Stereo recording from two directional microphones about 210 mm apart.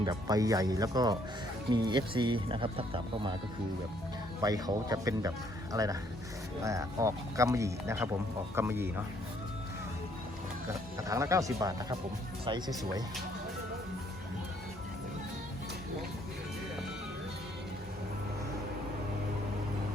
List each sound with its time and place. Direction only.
0.0 s speech: 20° right (ahead or behind)
4.4 s speech: 15° right (ahead or behind)
10.7 s speech: 15° right (ahead or behind)